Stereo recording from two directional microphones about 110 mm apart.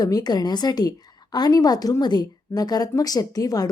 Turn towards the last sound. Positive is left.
turn(degrees=35)  # may be behind; listen again after turning